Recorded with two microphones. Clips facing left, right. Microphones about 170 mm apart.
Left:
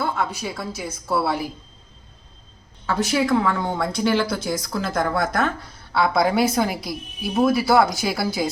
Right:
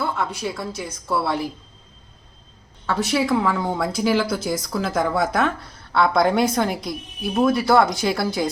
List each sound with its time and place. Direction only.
0.0 s speech: centre (ahead or behind)
2.8 s speech: centre (ahead or behind)